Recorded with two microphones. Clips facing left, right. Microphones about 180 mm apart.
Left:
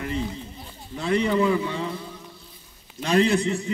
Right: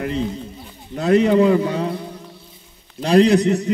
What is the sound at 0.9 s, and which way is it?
Speech, 45° right (ahead or behind).